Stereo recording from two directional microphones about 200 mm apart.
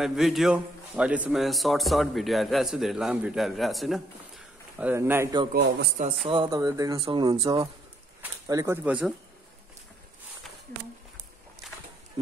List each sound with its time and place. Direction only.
0.0 s a man's voice: centre (ahead or behind); by 5.5 s 15° right (ahead or behind)
5.5 s a man's voice: 55° right (ahead or behind)
6.2 s speech: 25° right (ahead or behind)
8.2 s speech: 15° right (ahead or behind)
11.6 s a sound: centre (ahead or behind)